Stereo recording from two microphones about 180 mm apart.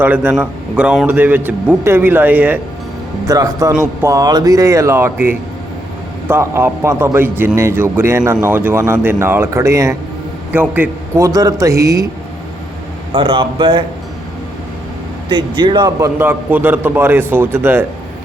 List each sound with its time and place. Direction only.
0.0 s a man's voice: 10° right (ahead or behind)
13.1 s speech: 30° right (ahead or behind)
15.3 s a man's voice: 25° right (ahead or behind)